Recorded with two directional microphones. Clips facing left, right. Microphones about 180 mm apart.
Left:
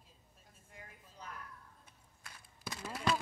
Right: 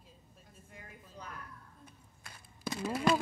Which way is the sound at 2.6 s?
20° right (ahead or behind).